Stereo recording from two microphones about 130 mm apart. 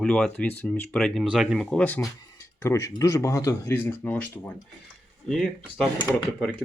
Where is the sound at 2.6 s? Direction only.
20° left (ahead or behind).